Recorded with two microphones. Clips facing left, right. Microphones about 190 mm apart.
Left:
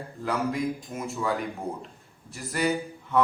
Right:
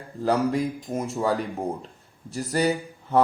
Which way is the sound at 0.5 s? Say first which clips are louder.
Right 4 dB; 35° right (ahead or behind).